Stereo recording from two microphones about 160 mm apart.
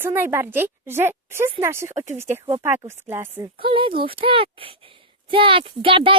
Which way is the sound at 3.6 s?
35° right (ahead or behind).